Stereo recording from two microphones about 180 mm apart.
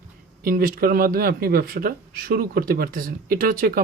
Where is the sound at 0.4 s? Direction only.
50° right (ahead or behind).